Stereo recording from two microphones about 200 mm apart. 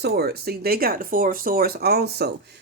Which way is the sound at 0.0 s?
55° right (ahead or behind).